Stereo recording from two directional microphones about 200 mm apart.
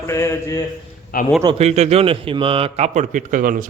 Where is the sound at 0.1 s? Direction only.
15° left (ahead or behind).